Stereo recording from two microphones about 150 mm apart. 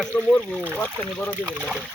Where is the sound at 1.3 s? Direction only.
10° right (ahead or behind).